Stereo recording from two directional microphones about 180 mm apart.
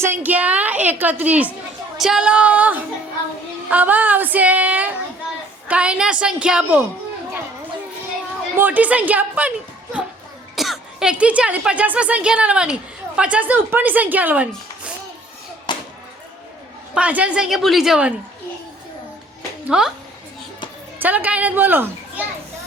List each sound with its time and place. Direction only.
0.0 s a woman's voice: 10° right (ahead or behind)
8.5 s speech: 10° right (ahead or behind)
10.5 s speech: centre (ahead or behind)
15.7 s a sound: 25° left (ahead or behind)
16.9 s a woman's voice: 5° right (ahead or behind)
19.6 s speech: 5° right (ahead or behind)
21.0 s speech: 10° right (ahead or behind)